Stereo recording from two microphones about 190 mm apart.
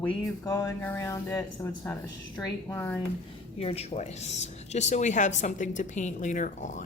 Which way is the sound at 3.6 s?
35° left (ahead or behind).